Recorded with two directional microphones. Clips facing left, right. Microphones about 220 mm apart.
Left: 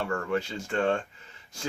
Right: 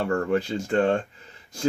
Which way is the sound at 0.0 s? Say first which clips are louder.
Right 5 dB; 35° right (ahead or behind).